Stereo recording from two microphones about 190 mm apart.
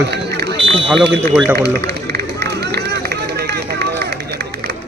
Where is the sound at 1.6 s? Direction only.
60° right (ahead or behind).